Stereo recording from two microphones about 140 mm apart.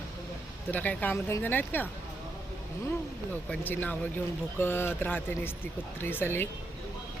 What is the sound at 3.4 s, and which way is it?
Speech, 15° left (ahead or behind).